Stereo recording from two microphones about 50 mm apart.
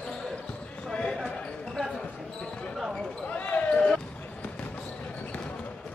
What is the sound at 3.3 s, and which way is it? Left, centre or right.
Basketball bounce, left.